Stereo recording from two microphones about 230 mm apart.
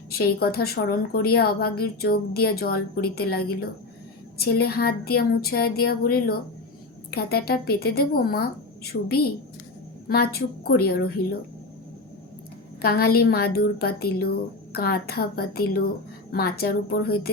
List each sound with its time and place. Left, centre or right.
0.1 s a woman's voice: left
12.8 s a woman's voice: left